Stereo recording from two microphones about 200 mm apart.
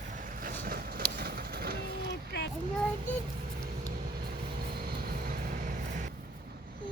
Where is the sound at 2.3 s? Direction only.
55° left (ahead or behind).